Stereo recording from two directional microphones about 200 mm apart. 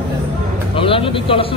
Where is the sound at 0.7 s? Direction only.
25° left (ahead or behind).